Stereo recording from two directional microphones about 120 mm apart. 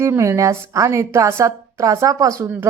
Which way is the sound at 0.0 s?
25° right (ahead or behind).